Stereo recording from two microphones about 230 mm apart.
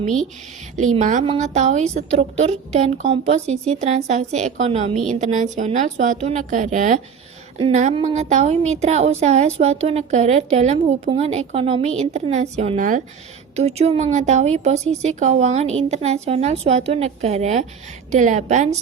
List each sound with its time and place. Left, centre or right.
0.9 s a woman's voice: right